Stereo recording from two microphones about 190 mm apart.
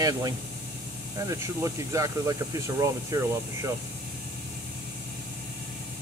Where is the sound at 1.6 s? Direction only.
15° right (ahead or behind).